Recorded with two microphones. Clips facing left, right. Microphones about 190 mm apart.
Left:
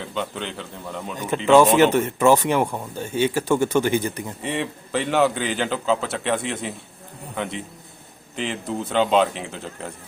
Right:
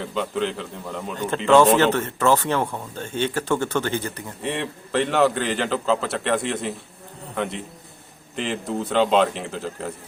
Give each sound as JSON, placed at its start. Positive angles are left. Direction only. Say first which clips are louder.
{"t": 0.0, "sound": "speech", "louder": "right 4 dB", "side_deg": 0}
{"t": 1.1, "sound": "speech", "louder": "left 1 dB", "side_deg": 10}
{"t": 4.4, "sound": "speech", "louder": "even", "side_deg": 0}